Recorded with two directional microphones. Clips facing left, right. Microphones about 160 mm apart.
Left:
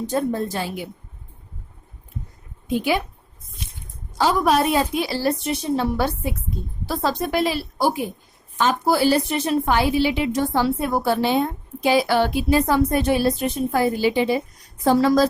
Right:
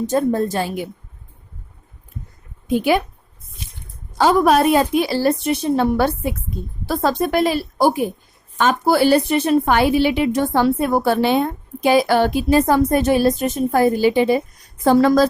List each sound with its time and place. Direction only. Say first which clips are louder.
0.1 s a woman's voice: right 4 dB; 45° right (ahead or behind)
2.6 s a woman's voice: right 5 dB; 50° right (ahead or behind)
4.2 s a woman's voice: right 4 dB; 55° right (ahead or behind)
8.5 s a woman's voice: right 3 dB; 60° right (ahead or behind)